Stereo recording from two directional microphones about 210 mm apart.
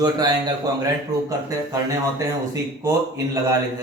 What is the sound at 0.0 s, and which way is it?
A man's voice, 20° right (ahead or behind).